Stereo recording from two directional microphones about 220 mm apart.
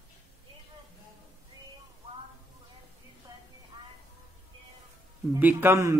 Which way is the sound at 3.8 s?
20° right (ahead or behind).